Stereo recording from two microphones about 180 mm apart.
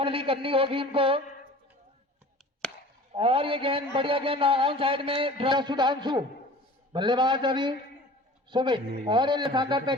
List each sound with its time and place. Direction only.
0.0 s a man's voice: 30° right (ahead or behind)
2.6 s chop: 5° left (ahead or behind)
3.1 s a man's voice: 30° right (ahead or behind)